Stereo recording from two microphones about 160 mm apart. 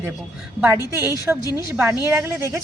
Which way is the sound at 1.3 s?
10° right (ahead or behind).